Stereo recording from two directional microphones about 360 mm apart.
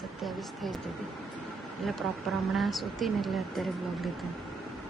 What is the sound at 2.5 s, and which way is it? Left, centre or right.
Speech, centre.